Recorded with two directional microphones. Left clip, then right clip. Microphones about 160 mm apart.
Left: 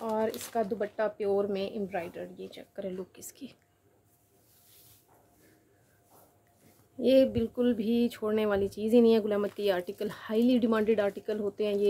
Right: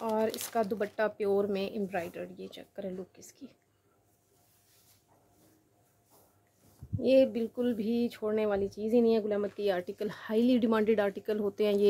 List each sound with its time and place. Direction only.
0.0 s a sound: 15° right (ahead or behind)
0.5 s speech: 20° right (ahead or behind)
3.0 s speech: 15° left (ahead or behind)
7.0 s speech: centre (ahead or behind); by 11.9 s 25° right (ahead or behind)